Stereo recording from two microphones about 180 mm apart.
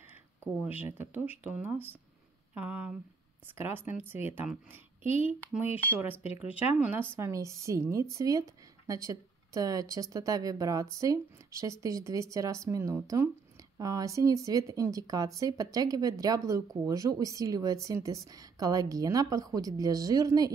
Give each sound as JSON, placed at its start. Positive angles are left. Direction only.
{"t": 0.6, "sound": "speech", "side_deg": -10}